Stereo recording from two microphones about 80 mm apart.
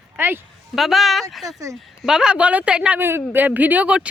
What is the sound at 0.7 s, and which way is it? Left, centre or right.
Speech, centre.